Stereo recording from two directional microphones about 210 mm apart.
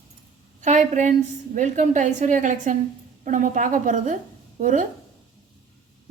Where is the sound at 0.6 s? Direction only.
35° right (ahead or behind).